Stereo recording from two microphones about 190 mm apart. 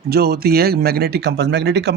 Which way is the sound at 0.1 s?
55° right (ahead or behind).